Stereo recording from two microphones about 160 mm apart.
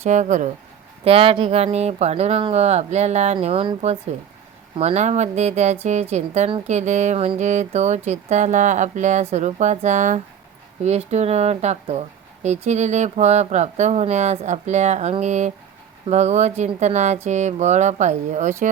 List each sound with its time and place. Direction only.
0.0 s speech: 50° right (ahead or behind)
1.0 s speech: 35° right (ahead or behind)